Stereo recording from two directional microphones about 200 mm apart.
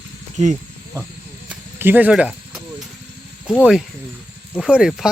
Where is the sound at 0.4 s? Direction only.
35° right (ahead or behind).